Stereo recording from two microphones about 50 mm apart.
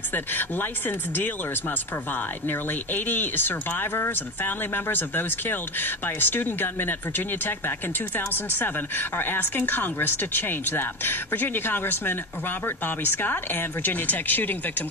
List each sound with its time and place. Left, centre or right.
0.1 s speech: left